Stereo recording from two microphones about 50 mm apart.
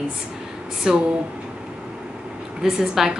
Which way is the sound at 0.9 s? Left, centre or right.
Centre.